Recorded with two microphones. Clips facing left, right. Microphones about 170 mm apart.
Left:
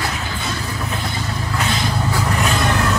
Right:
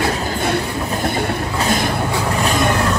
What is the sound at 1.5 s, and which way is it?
Music, 45° right (ahead or behind).